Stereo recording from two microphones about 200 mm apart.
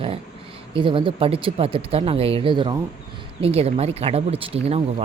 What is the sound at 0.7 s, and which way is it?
Speech, 25° right (ahead or behind).